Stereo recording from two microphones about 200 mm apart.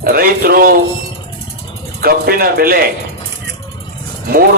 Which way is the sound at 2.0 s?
50° right (ahead or behind).